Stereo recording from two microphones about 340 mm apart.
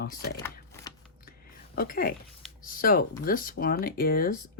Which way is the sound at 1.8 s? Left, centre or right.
Left.